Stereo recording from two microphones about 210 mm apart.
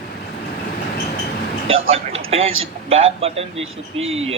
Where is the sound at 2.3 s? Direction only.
30° right (ahead or behind).